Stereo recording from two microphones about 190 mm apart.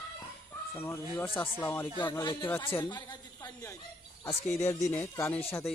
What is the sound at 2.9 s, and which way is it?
Chuckle, 20° left (ahead or behind).